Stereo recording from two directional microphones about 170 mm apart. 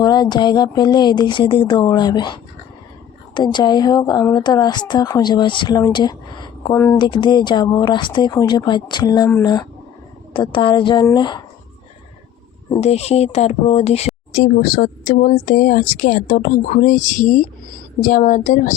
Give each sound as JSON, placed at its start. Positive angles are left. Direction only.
{"t": 0.0, "sound": "a woman's voice", "side_deg": 25}
{"t": 6.7, "sound": "speech", "side_deg": 15}
{"t": 7.0, "sound": "a woman's voice", "side_deg": 25}
{"t": 12.8, "sound": "speech", "side_deg": 40}
{"t": 14.3, "sound": "speech", "side_deg": 60}